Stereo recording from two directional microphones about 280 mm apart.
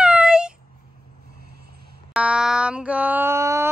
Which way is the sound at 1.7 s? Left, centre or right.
Right.